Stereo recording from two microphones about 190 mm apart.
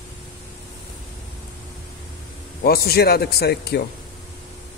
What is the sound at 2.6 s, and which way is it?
A man's voice, 55° left (ahead or behind).